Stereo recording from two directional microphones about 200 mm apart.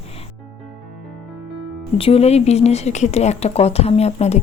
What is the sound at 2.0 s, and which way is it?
Speech, 30° left (ahead or behind).